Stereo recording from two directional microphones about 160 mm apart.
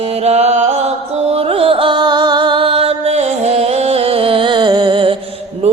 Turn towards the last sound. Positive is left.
turn(degrees=-40)  # may be behind; listen again after turning